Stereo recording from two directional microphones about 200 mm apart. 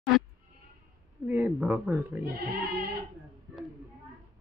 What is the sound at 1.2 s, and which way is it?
Speech, 10° right (ahead or behind).